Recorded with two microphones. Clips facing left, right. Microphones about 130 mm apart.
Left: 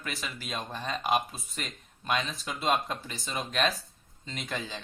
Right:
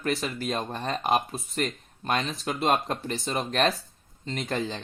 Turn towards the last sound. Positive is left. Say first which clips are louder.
# right 7 dB
turn(degrees=-55)  # may be behind; listen again after turning